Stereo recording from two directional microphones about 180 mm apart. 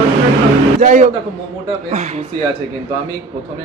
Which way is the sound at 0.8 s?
40° right (ahead or behind).